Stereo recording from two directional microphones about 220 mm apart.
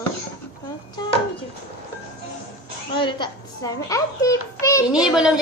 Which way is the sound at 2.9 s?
20° left (ahead or behind).